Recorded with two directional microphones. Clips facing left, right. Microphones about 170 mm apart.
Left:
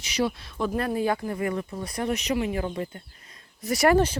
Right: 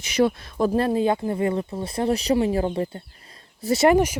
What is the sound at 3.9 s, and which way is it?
Speech, 10° right (ahead or behind).